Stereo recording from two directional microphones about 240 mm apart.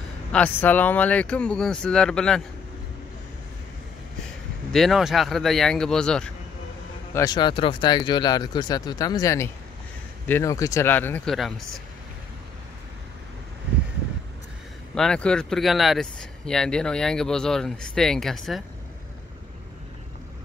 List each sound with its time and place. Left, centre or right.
0.3 s speech: centre
4.7 s speech: centre
7.2 s speech: centre
15.0 s speech: centre